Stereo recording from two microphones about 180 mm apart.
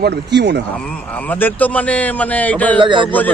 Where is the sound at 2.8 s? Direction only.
25° right (ahead or behind).